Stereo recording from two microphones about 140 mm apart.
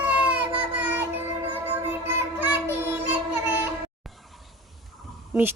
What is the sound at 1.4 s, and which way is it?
Music, 15° right (ahead or behind).